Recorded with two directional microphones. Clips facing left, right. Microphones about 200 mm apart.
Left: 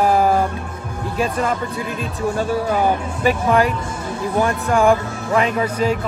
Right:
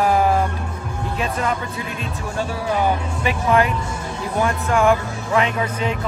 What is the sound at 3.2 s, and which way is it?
Speech, 40° left (ahead or behind).